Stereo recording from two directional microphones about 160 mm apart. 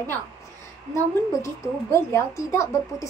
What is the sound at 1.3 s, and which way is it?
A woman's voice, 20° left (ahead or behind).